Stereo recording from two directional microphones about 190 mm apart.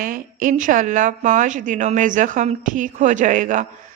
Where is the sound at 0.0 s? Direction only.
45° right (ahead or behind).